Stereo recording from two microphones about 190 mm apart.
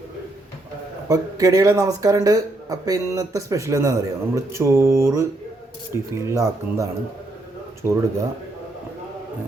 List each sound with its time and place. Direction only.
1.0 s speech: 20° right (ahead or behind)